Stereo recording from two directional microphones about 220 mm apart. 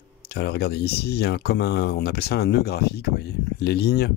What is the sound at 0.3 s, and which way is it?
Speech, 45° left (ahead or behind).